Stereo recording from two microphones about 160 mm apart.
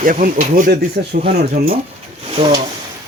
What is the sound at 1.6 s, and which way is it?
Speech, 85° right.